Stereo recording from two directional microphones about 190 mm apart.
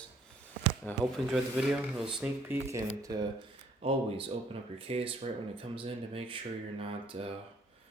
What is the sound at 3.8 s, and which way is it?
Speech, 30° right (ahead or behind).